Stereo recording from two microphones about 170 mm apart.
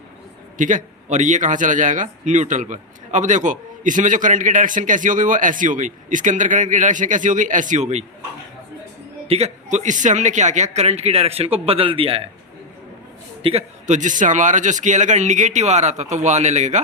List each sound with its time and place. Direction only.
0.6 s a man's voice: 45° right (ahead or behind)
9.2 s a man's voice: 35° right (ahead or behind)
13.4 s a man's voice: 35° right (ahead or behind)